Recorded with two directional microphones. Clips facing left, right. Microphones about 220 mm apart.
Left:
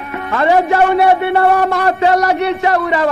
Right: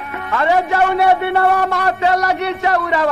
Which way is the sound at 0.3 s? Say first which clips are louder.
Left 3 dB; 35° left (ahead or behind).